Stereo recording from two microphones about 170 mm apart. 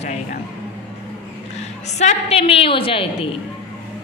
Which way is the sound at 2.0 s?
40° left (ahead or behind).